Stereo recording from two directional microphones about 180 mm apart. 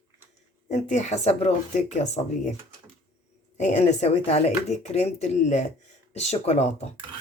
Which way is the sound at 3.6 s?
40° left (ahead or behind).